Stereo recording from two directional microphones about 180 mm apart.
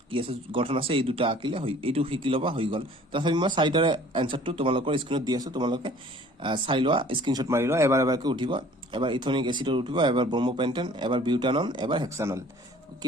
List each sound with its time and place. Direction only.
0.1 s speech: 30° right (ahead or behind)